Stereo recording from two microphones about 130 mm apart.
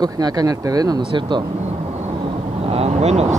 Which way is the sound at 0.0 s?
30° right (ahead or behind).